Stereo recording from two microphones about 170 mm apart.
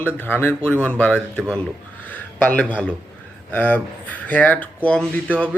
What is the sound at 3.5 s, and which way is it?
Speech, 10° left (ahead or behind).